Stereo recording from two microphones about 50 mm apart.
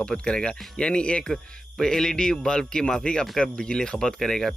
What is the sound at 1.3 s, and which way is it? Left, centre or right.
Speech, centre.